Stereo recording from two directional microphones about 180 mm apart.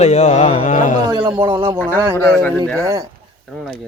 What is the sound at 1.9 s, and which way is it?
Speech, 15° right (ahead or behind).